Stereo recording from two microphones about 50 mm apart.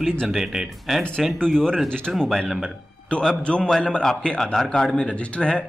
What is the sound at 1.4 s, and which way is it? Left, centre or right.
Speech, centre.